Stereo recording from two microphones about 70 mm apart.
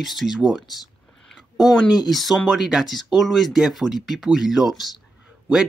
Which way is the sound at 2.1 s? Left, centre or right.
Centre.